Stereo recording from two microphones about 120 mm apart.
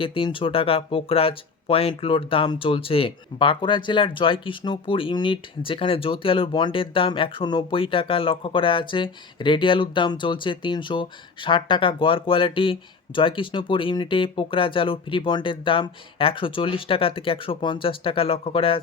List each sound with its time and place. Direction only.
0.0 s speech: 45° left (ahead or behind)